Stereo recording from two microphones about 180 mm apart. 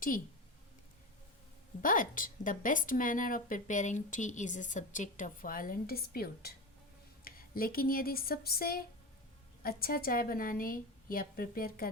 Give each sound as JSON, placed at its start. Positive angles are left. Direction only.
{"t": 1.8, "sound": "a woman's voice", "side_deg": 50}